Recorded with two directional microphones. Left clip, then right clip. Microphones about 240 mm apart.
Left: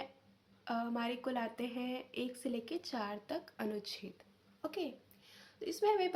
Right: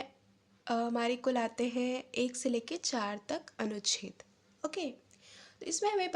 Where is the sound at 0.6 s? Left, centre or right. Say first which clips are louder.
Right 6 dB; right.